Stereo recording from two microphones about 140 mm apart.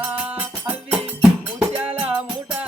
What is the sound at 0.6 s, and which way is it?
Music, 5° right (ahead or behind).